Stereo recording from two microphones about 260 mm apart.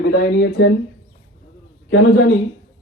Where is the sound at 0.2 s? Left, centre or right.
Left.